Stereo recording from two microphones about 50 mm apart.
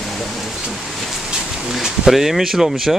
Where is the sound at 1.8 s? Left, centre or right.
Centre.